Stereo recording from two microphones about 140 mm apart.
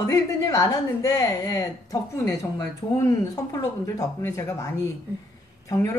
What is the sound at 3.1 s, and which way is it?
A woman's voice, 25° left (ahead or behind).